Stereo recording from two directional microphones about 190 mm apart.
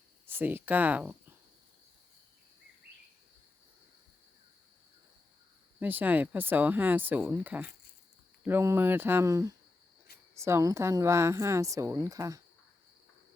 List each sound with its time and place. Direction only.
0.3 s speech: 10° right (ahead or behind)
5.8 s speech: 10° right (ahead or behind)